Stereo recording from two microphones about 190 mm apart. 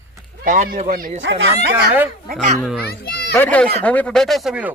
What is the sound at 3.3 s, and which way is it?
Speech, 10° left (ahead or behind).